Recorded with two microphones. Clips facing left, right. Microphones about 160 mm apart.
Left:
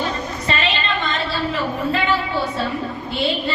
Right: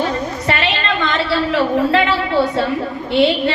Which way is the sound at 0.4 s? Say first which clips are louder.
Right 2 dB; 75° right (ahead or behind).